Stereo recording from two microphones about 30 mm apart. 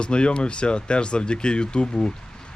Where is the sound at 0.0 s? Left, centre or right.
Left.